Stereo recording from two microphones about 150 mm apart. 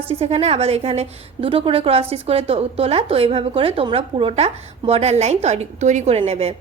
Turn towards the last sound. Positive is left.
turn(degrees=-40)  # may be behind; listen again after turning